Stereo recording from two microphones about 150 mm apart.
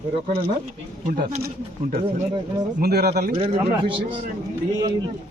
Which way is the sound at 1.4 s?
90° right.